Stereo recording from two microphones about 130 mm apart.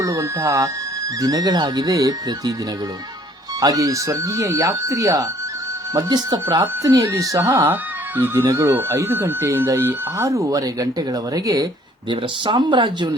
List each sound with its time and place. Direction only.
0.0 s speech: 25° right (ahead or behind)
3.6 s speech: 25° right (ahead or behind)